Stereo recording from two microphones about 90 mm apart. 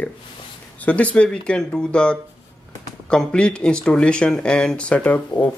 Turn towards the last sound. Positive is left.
turn(degrees=15)  # may be behind; listen again after turning